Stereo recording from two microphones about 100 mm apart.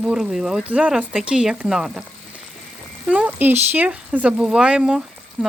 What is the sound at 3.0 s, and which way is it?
Speech, 15° right (ahead or behind).